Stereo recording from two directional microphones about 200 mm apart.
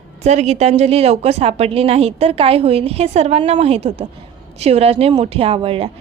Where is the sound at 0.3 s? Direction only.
35° right (ahead or behind).